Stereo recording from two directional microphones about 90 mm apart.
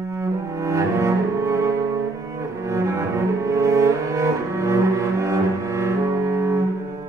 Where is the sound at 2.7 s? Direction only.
35° right (ahead or behind).